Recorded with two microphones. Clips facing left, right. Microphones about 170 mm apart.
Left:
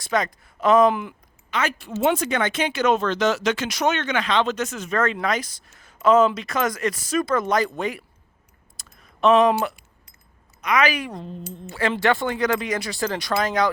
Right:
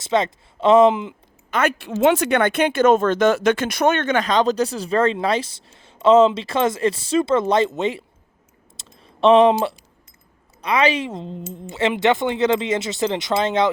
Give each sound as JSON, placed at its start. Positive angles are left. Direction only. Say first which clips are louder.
{"t": 0.0, "sound": "speech", "louder": "right 4 dB", "side_deg": -25}
{"t": 1.5, "sound": "speech", "louder": "right 5 dB", "side_deg": -55}
{"t": 8.8, "sound": "a sound", "louder": "right 3 dB", "side_deg": -30}
{"t": 10.6, "sound": "speech", "louder": "right 3 dB", "side_deg": -30}